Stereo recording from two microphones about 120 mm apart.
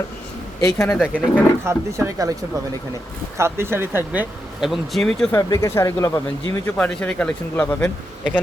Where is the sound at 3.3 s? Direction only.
20° right (ahead or behind).